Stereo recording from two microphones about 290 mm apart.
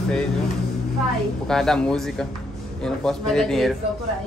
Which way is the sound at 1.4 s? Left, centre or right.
Centre.